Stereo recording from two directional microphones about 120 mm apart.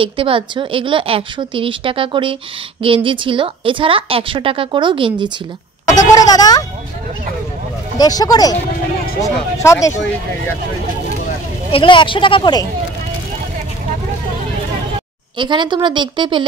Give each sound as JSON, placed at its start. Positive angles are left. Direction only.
{"t": 0.0, "sound": "speech", "side_deg": -45}
{"t": 5.9, "sound": "a sound", "side_deg": 30}
{"t": 8.0, "sound": "speech", "side_deg": 30}
{"t": 11.7, "sound": "speech", "side_deg": 45}
{"t": 15.3, "sound": "a woman's voice", "side_deg": -40}